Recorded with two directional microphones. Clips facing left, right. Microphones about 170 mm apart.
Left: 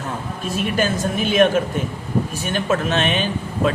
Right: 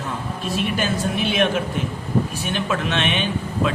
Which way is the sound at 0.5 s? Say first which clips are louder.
Left 2 dB; 45° left (ahead or behind).